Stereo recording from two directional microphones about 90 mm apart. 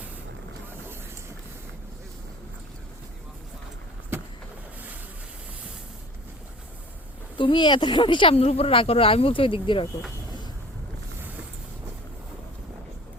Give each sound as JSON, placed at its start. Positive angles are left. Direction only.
{"t": 7.3, "sound": "speech", "side_deg": 65}